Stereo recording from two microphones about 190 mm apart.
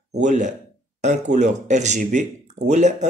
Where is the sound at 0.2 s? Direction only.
40° right (ahead or behind).